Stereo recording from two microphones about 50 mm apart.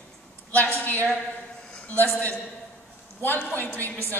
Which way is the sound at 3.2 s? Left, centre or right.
Left.